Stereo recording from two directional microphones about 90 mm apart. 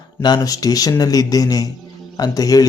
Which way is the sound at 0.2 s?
50° left (ahead or behind).